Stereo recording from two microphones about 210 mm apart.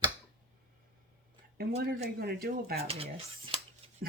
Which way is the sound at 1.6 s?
50° right (ahead or behind).